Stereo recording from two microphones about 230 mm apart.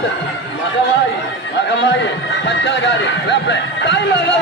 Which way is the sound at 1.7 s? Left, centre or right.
Left.